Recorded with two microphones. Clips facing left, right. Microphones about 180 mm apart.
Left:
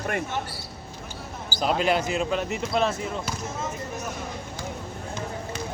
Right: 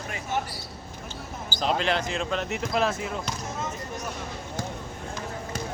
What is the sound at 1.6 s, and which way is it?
Speech, 5° left (ahead or behind).